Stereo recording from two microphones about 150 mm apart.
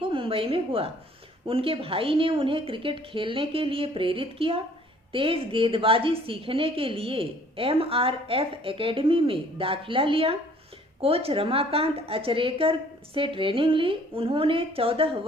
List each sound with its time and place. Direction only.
0.0 s a woman's voice: 35° right (ahead or behind)